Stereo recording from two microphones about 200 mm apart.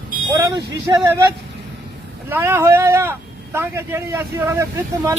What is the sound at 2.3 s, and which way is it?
Speech, 10° right (ahead or behind).